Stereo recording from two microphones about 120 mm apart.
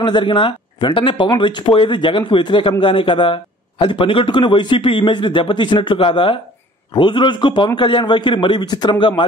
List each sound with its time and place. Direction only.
0.0 s a man's voice: 45° left (ahead or behind)